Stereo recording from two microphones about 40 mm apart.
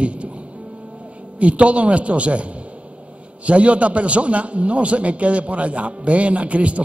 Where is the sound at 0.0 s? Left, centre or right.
Right.